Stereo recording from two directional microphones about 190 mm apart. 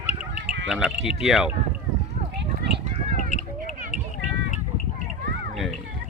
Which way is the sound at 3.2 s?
40° left (ahead or behind).